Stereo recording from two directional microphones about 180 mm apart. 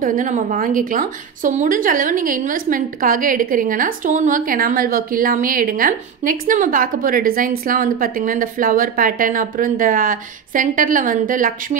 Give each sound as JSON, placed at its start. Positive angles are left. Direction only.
{"t": 0.0, "sound": "a woman's voice", "side_deg": -45}